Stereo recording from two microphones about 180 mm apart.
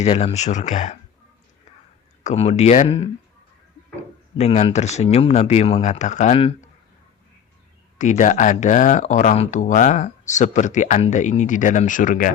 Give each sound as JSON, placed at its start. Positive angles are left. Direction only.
{"t": 0.0, "sound": "speech", "side_deg": 35}
{"t": 2.2, "sound": "speech", "side_deg": 35}
{"t": 4.4, "sound": "speech", "side_deg": 35}
{"t": 7.9, "sound": "speech", "side_deg": 45}